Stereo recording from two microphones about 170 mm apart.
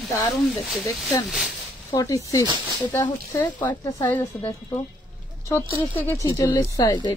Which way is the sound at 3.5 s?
25° left (ahead or behind).